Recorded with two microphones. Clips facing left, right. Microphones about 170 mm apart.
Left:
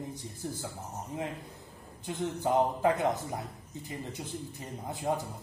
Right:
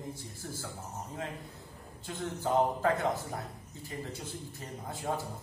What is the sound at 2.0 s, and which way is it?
A man's voice, 20° left (ahead or behind).